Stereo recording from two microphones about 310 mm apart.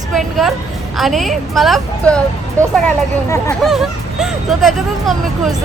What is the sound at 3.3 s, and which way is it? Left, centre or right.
Speech, centre.